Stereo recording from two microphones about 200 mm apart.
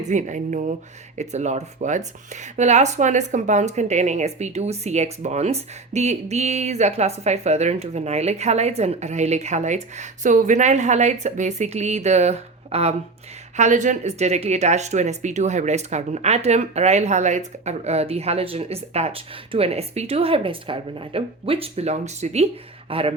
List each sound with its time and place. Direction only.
0.0 s speech: 35° right (ahead or behind)